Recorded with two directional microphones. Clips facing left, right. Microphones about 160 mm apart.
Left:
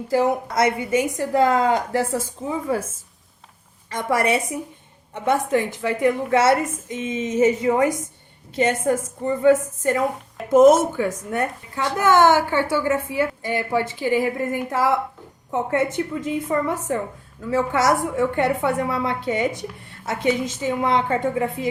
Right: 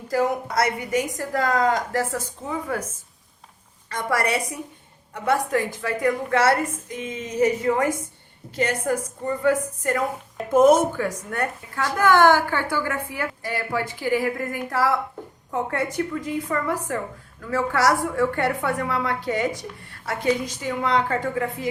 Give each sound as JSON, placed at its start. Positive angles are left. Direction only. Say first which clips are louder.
{"t": 0.1, "sound": "a woman's voice", "louder": "left 2 dB", "side_deg": 25}
{"t": 1.9, "sound": "speech", "louder": "left 3 dB", "side_deg": 10}
{"t": 3.8, "sound": "a woman's voice", "louder": "left 3 dB", "side_deg": 20}